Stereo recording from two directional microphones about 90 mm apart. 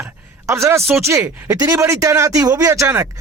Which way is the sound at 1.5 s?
35° right (ahead or behind).